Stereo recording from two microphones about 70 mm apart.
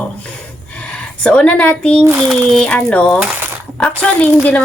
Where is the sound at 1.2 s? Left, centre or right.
Centre.